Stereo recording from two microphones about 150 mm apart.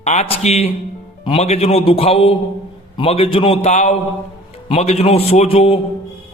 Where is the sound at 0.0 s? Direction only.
45° left (ahead or behind).